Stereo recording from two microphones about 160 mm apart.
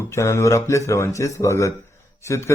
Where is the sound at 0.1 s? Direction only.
15° left (ahead or behind).